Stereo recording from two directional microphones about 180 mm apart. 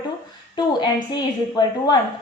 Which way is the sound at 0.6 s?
25° left (ahead or behind).